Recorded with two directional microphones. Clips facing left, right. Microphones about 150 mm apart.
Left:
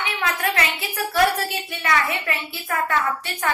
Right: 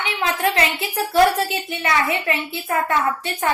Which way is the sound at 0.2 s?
25° right (ahead or behind).